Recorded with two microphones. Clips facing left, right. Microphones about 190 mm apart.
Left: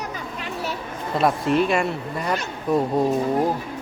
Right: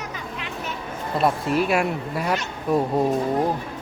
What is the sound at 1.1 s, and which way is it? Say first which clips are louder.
Speech: left 2 dB; centre (ahead or behind).